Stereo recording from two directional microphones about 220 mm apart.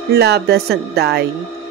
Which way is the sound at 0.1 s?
45° right (ahead or behind).